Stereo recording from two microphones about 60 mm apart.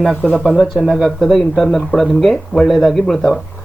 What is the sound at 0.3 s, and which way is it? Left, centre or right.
Speech, centre.